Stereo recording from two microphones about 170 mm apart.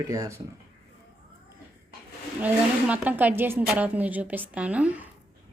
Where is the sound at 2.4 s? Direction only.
10° right (ahead or behind).